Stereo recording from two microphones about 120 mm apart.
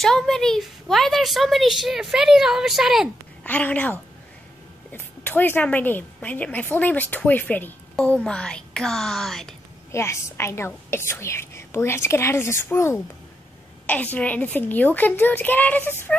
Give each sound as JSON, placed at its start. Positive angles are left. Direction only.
{"t": 0.0, "sound": "a woman's voice", "side_deg": 5}
{"t": 3.4, "sound": "a woman's voice", "side_deg": 10}
{"t": 9.9, "sound": "a woman's voice", "side_deg": 25}